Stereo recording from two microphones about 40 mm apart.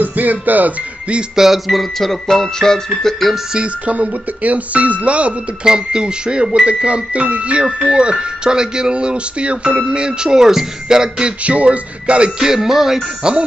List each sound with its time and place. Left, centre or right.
0.0 s music: right
1.3 s music: centre
3.0 s speech: centre
3.5 s speech: right
5.6 s speech: right
9.9 s music: right
11.4 s speech: right
12.4 s music: centre
13.2 s speech: right